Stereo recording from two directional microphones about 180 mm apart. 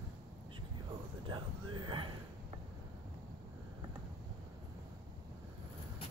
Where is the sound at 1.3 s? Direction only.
25° right (ahead or behind).